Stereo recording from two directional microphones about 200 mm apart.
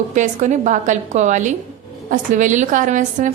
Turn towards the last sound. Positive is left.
turn(degrees=-40)  # may be behind; listen again after turning